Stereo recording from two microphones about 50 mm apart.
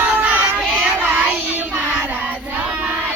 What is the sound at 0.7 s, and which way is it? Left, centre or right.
Child singing, right.